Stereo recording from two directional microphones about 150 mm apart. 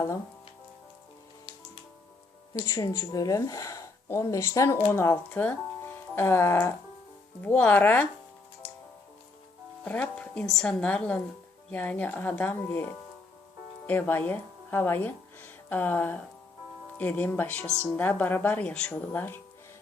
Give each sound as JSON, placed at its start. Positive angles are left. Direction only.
{"t": 2.5, "sound": "speech", "side_deg": 20}
{"t": 9.8, "sound": "speech", "side_deg": 10}